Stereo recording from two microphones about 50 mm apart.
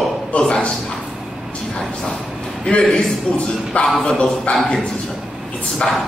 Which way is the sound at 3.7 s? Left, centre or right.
Left.